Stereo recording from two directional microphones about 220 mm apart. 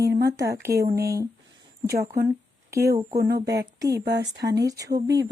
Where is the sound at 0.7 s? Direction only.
45° right (ahead or behind).